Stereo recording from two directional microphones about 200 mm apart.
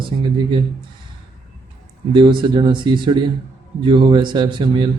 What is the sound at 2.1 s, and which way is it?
Speech, 25° right (ahead or behind).